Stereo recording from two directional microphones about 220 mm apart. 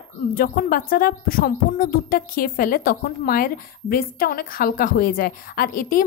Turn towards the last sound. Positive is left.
turn(degrees=40)  # may be behind; listen again after turning